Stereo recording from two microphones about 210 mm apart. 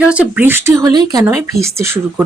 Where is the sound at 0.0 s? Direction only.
5° right (ahead or behind).